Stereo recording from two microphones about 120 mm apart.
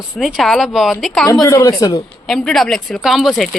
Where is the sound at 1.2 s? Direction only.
25° left (ahead or behind).